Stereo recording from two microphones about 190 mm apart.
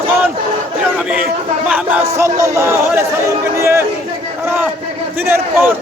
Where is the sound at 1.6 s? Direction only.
10° right (ahead or behind).